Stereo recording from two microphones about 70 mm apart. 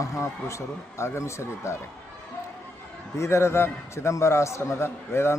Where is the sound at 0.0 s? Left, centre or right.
Left.